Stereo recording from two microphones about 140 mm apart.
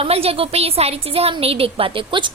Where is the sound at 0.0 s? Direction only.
45° right (ahead or behind).